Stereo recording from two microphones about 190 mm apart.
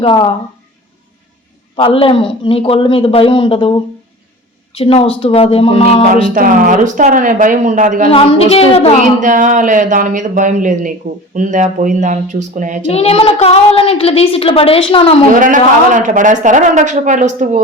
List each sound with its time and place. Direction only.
0.0 s a man's voice: 25° left (ahead or behind)
1.7 s a man's voice: 30° left (ahead or behind)
4.8 s a child's voice: 30° left (ahead or behind)
6.3 s speech: 45° right (ahead or behind)
8.1 s a child's voice: 30° left (ahead or behind)
9.2 s a woman's voice: 45° right (ahead or behind)
12.9 s a child's voice: 30° left (ahead or behind)
15.4 s a woman's voice: 45° right (ahead or behind)